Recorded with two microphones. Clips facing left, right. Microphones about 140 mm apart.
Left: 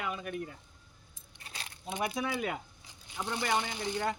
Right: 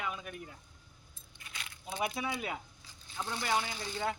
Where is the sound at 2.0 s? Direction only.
Centre (ahead or behind).